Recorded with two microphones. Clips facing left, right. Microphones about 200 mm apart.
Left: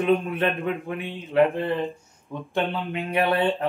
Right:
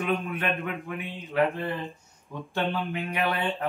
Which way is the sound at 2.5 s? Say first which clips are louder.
Left 2 dB; 25° left (ahead or behind).